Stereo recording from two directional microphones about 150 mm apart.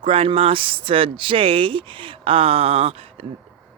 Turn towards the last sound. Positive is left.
turn(degrees=-40)  # may be behind; listen again after turning